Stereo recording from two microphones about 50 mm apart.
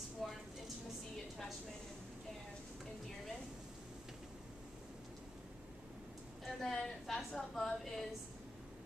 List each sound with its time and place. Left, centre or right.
0.2 s vehicle: centre
6.4 s a woman's voice: centre